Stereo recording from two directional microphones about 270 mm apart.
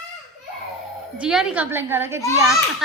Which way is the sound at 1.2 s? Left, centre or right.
Centre.